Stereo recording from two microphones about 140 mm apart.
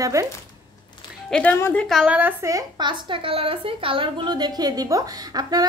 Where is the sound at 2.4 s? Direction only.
25° right (ahead or behind).